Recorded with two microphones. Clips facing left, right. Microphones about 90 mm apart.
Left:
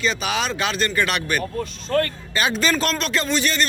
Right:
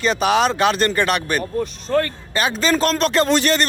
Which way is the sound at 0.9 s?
40° right (ahead or behind).